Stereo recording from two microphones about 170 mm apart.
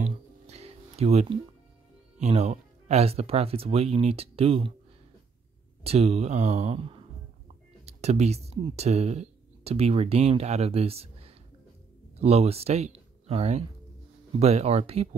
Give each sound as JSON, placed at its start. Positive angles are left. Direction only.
{"t": 0.0, "sound": "music", "side_deg": -40}
{"t": 2.1, "sound": "speech", "side_deg": -40}
{"t": 5.9, "sound": "speech", "side_deg": -40}